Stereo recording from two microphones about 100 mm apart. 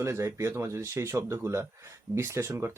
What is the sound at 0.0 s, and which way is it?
Speech, 30° right (ahead or behind).